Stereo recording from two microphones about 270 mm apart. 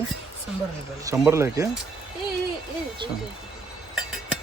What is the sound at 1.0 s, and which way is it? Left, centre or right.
Speech, centre.